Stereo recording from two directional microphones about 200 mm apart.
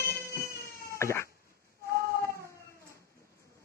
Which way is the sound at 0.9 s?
15° left (ahead or behind).